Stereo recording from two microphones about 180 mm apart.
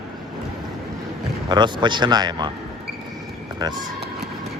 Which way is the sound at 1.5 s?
25° right (ahead or behind).